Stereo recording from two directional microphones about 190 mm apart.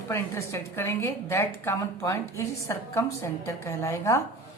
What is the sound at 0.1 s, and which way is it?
A woman's voice, 15° left (ahead or behind).